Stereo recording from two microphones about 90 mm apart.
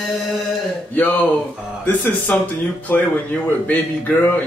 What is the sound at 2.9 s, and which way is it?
Speech, 20° left (ahead or behind).